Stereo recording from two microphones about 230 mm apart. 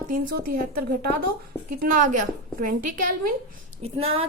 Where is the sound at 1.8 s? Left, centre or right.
Right.